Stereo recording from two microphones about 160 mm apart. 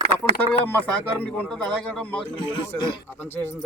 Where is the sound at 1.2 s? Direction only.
5° left (ahead or behind).